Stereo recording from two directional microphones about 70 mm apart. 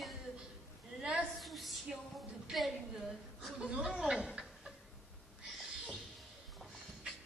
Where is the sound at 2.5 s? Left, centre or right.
Centre.